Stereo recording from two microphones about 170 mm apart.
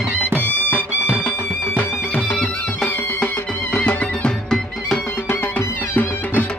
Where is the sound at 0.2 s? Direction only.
15° right (ahead or behind).